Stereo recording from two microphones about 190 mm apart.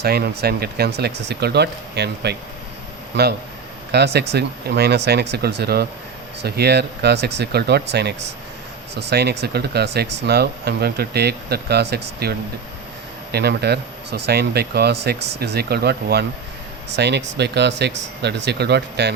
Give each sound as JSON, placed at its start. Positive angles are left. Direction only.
{"t": 0.0, "sound": "speech", "side_deg": -55}
{"t": 3.9, "sound": "speech", "side_deg": -60}
{"t": 13.3, "sound": "speech", "side_deg": -60}